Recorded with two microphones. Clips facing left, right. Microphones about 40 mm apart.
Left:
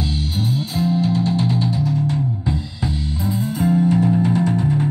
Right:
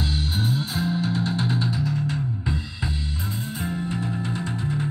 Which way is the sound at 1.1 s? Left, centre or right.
Centre.